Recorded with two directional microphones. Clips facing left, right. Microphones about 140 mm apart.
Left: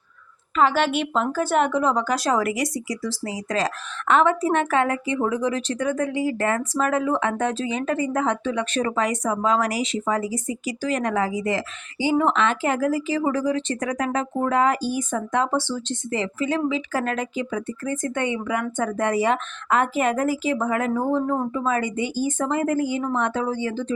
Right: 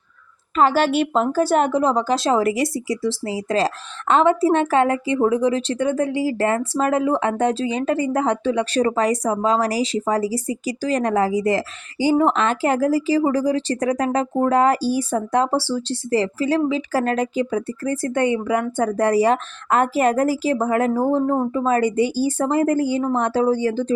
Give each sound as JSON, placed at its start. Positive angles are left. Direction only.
{"t": 0.5, "sound": "a woman's voice", "side_deg": -40}